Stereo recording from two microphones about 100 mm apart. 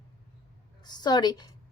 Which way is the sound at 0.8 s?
45° left (ahead or behind).